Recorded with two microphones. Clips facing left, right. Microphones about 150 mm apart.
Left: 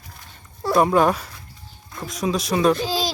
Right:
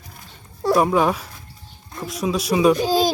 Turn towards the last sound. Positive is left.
turn(degrees=-50)  # may be behind; listen again after turning